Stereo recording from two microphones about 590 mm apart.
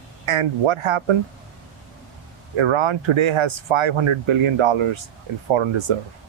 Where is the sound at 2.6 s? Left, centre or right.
Right.